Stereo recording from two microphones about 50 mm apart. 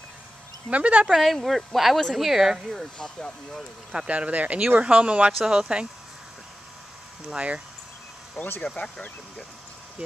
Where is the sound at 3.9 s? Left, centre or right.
Right.